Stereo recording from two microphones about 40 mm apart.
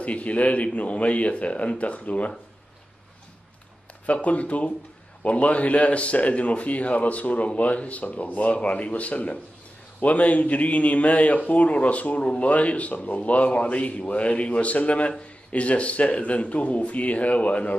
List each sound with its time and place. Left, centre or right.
0.0 s a man's voice: left
4.0 s a man's voice: left